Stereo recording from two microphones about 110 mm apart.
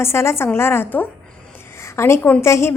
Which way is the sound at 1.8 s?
25° left (ahead or behind).